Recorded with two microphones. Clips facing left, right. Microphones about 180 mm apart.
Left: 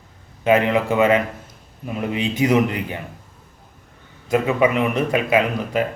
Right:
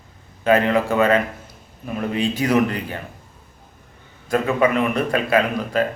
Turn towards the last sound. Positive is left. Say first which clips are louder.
# even
turn(degrees=15)  # may be behind; listen again after turning